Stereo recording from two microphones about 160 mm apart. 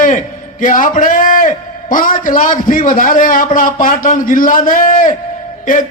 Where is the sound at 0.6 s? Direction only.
55° left (ahead or behind).